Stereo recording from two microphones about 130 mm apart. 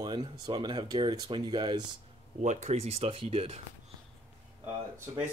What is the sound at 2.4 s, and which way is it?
Speech, 65° right (ahead or behind).